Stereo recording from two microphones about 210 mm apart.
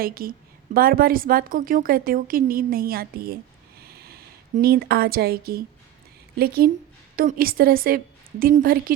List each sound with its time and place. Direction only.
0.0 s a woman's voice: 45° right (ahead or behind)